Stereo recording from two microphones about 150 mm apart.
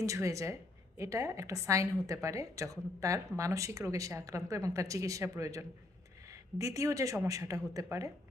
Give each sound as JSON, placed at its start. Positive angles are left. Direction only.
{"t": 0.0, "sound": "a woman's voice", "side_deg": -20}